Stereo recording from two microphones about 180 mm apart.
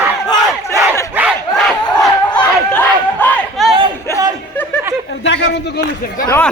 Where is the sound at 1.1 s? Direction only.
5° right (ahead or behind).